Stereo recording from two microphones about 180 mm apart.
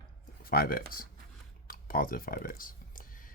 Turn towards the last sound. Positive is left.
turn(degrees=55)  # may be behind; listen again after turning